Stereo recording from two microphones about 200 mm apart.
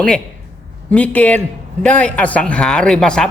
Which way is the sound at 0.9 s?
5° left (ahead or behind).